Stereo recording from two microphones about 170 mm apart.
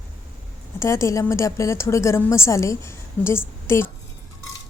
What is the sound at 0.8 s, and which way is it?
A woman's voice, 15° left (ahead or behind).